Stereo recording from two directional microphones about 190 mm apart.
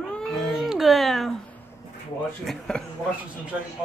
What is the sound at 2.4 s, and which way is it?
Speech, centre (ahead or behind).